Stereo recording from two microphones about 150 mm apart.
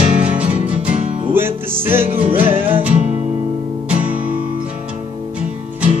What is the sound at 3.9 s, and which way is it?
Music, 10° right (ahead or behind).